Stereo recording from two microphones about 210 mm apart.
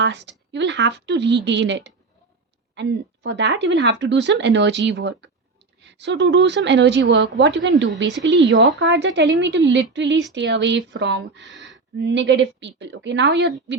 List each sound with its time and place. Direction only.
0.0 s a woman's voice: 55° right (ahead or behind)